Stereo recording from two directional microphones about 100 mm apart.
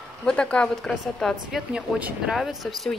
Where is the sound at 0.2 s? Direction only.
10° left (ahead or behind).